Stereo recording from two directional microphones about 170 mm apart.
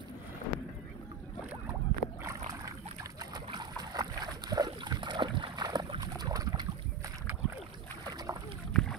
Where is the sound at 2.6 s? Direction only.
20° right (ahead or behind).